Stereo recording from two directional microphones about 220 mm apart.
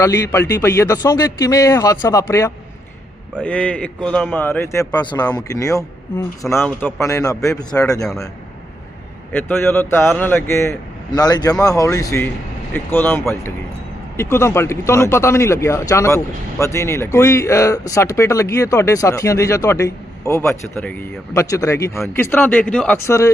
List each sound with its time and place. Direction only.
0.0 s speech: 10° left (ahead or behind)
8.0 s a man's voice: centre (ahead or behind)
9.3 s speech: 10° left (ahead or behind)